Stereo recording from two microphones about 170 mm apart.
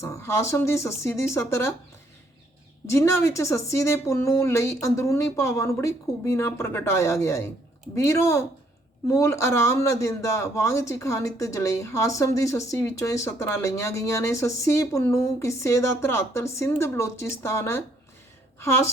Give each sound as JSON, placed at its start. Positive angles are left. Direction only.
{"t": 0.0, "sound": "a man's voice", "side_deg": 15}
{"t": 2.9, "sound": "a man's voice", "side_deg": 15}